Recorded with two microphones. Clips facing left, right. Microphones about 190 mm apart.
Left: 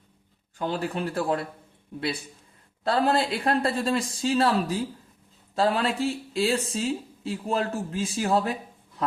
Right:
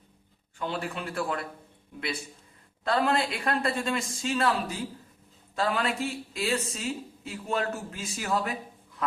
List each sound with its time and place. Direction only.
0.6 s speech: 35° left (ahead or behind)
2.8 s speech: 35° left (ahead or behind)